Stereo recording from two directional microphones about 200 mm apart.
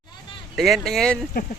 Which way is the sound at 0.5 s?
Centre (ahead or behind).